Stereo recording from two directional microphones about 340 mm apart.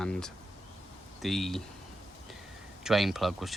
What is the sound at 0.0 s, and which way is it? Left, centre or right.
Speech, centre.